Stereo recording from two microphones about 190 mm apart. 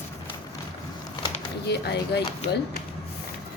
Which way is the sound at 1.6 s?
60° left (ahead or behind).